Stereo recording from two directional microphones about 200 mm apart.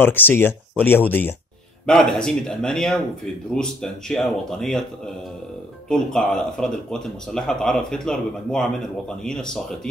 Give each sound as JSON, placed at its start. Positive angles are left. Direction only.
{"t": 0.0, "sound": "speech", "side_deg": 10}